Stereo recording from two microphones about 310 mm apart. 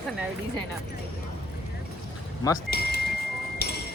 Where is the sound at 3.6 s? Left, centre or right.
Left.